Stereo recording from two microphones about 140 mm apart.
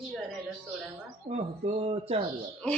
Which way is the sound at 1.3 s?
45° right (ahead or behind).